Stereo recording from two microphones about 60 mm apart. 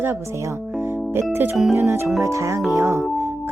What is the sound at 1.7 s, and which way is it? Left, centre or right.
Speech, right.